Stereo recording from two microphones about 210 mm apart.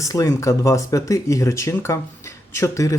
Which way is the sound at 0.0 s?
15° left (ahead or behind).